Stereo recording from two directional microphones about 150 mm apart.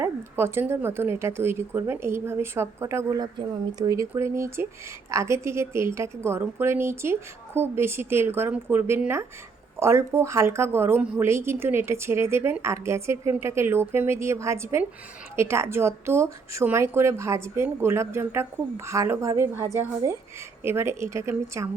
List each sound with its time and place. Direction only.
0.0 s a woman's voice: 15° right (ahead or behind)